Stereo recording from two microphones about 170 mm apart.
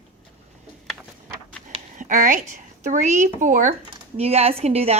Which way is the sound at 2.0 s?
50° right (ahead or behind).